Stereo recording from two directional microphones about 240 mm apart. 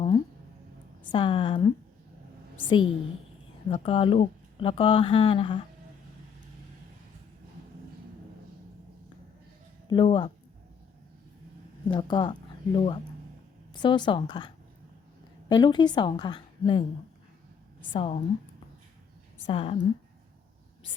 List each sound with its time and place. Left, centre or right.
1.1 s speech: left
9.9 s speech: left
11.9 s speech: centre
17.9 s speech: left
19.5 s speech: left